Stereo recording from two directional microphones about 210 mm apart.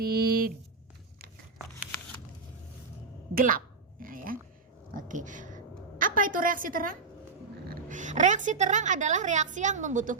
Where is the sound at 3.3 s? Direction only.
40° right (ahead or behind).